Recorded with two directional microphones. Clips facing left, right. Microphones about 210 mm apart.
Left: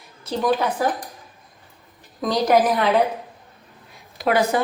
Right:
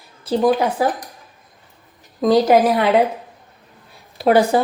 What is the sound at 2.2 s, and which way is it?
Speech, 25° right (ahead or behind).